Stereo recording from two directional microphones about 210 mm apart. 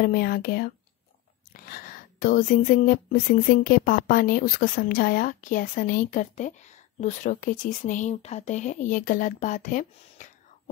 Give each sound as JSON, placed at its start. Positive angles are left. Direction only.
{"t": 0.0, "sound": "a woman's voice", "side_deg": 45}